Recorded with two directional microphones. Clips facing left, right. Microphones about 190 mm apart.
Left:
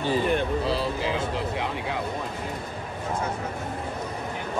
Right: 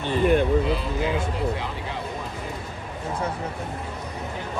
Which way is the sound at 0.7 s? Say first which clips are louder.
Right 1 dB; 35° left (ahead or behind).